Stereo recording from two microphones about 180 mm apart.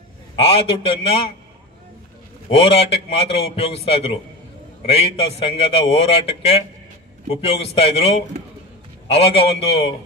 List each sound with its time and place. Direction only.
0.4 s a man's voice: 35° left (ahead or behind)
2.4 s a man's voice: 35° left (ahead or behind)